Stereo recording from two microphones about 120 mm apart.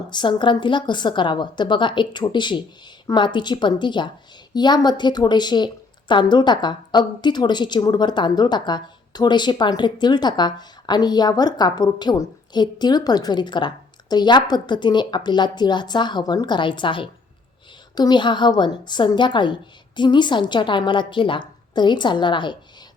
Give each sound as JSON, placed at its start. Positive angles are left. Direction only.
{"t": 0.1, "sound": "a woman's voice", "side_deg": 40}